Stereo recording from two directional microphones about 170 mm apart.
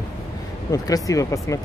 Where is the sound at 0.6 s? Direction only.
20° left (ahead or behind).